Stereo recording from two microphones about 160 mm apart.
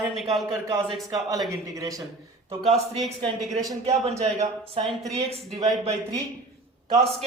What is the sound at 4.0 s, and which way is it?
Speech, 40° right (ahead or behind).